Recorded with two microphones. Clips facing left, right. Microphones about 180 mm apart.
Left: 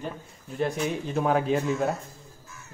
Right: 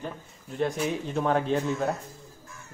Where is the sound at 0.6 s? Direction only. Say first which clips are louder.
Even; centre (ahead or behind).